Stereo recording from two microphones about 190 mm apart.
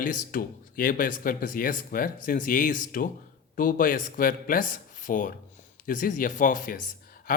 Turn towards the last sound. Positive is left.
turn(degrees=50)  # may be behind; listen again after turning